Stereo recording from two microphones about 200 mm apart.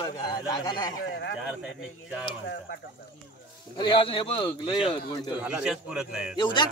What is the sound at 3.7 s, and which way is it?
Speech, 25° left (ahead or behind).